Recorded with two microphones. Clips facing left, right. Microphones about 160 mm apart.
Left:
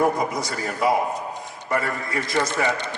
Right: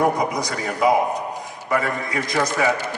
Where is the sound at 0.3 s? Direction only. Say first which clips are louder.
Right 2 dB; centre (ahead or behind).